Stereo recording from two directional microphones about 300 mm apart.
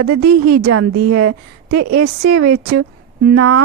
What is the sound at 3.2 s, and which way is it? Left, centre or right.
Speech, right.